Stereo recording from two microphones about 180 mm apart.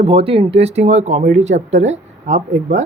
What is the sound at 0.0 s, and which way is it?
Speech, 35° right (ahead or behind).